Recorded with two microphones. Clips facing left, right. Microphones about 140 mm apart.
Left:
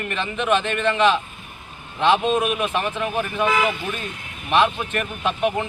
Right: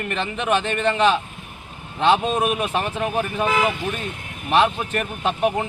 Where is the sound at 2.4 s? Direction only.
35° right (ahead or behind).